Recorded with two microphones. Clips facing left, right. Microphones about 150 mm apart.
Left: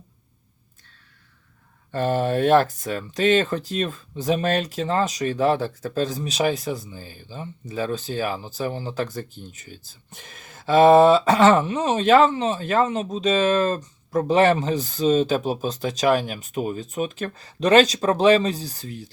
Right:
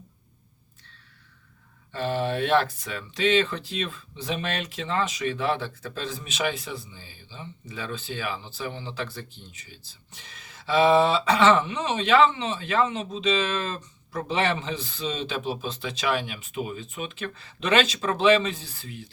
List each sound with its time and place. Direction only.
1.9 s speech: 50° left (ahead or behind)